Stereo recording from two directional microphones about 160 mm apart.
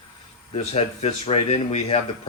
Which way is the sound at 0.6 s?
40° left (ahead or behind).